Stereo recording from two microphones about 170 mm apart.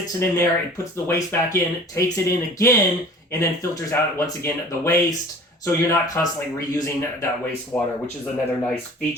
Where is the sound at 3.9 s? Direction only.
15° left (ahead or behind).